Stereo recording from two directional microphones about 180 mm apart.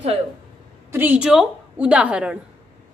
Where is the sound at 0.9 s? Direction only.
10° right (ahead or behind).